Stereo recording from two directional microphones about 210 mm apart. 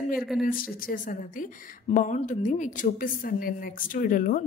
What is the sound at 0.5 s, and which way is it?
Speech, 40° left (ahead or behind).